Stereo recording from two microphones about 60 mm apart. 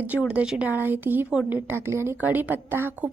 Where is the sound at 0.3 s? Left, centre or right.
Centre.